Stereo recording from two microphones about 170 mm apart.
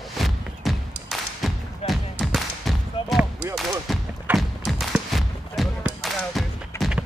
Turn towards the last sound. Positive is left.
turn(degrees=15)  # may be behind; listen again after turning